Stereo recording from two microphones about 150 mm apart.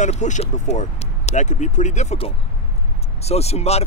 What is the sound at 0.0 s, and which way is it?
Speech, 55° left (ahead or behind).